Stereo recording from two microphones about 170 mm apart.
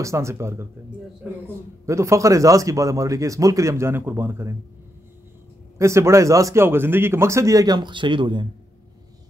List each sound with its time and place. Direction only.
0.0 s speech: 15° right (ahead or behind)
1.9 s speech: 15° right (ahead or behind)
5.8 s speech: 15° right (ahead or behind)